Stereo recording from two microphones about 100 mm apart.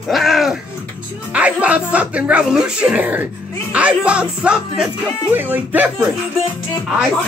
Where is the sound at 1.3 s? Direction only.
15° right (ahead or behind).